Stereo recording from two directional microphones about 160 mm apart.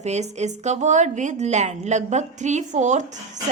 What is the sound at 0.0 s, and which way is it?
A woman's voice, 45° right (ahead or behind).